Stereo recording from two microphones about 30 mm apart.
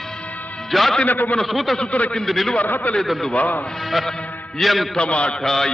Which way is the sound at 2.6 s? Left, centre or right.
Left.